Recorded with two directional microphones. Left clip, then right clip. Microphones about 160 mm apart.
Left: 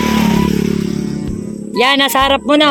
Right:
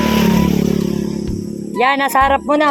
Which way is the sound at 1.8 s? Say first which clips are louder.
Left 2 dB; 55° left (ahead or behind).